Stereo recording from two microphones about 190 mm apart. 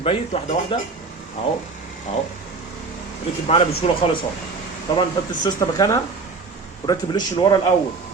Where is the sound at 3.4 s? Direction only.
30° left (ahead or behind).